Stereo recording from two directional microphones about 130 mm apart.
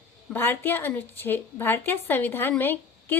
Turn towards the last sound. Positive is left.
turn(degrees=15)  # may be behind; listen again after turning